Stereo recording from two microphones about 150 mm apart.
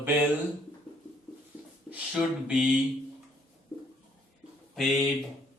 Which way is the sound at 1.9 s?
5° right (ahead or behind).